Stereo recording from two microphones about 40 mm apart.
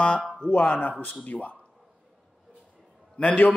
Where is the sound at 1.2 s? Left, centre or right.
Left.